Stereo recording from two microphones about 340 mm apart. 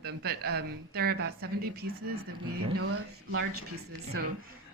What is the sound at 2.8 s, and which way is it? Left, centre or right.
Speech, right.